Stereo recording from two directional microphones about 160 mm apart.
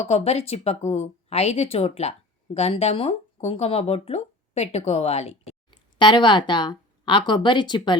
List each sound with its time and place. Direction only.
0.0 s speech: 40° left (ahead or behind)